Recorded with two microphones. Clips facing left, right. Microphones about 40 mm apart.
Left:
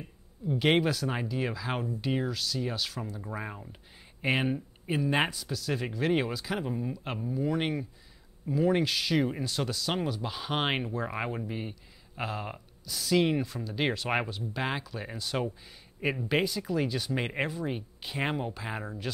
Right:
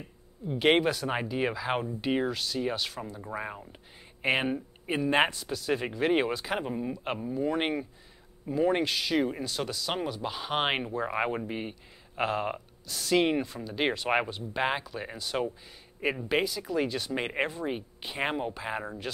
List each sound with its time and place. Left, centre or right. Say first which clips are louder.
0.5 s speech: right 2 dB; centre
1.0 s speech: right 2 dB; right